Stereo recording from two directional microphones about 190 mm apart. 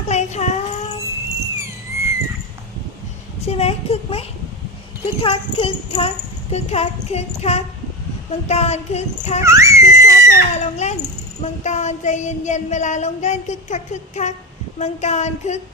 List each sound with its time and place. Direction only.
0.1 s child singing: 35° left (ahead or behind)
3.4 s a sound: 35° left (ahead or behind)
5.2 s a child's voice: 30° left (ahead or behind)
8.4 s child singing: 35° left (ahead or behind)
9.4 s screaming: 15° right (ahead or behind)
10.3 s child singing: 35° left (ahead or behind)